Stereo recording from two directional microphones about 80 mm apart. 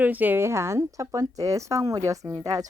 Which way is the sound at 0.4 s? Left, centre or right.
Right.